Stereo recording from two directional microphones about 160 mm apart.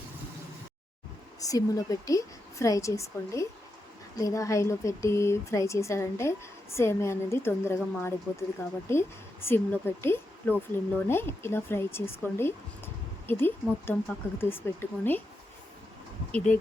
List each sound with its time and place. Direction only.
1.4 s speech: 20° left (ahead or behind)
16.3 s speech: 5° left (ahead or behind)